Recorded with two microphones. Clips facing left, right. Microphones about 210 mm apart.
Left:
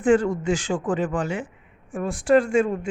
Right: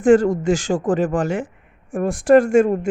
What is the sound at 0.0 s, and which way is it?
A woman's voice, 45° right (ahead or behind).